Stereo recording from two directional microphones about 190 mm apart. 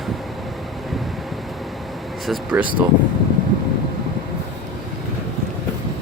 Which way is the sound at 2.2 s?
5° right (ahead or behind).